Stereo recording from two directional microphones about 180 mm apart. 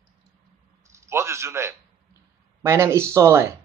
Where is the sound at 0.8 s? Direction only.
15° right (ahead or behind).